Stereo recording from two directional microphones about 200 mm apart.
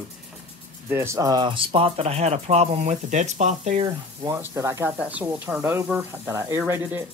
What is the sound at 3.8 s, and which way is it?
Speech, 15° right (ahead or behind).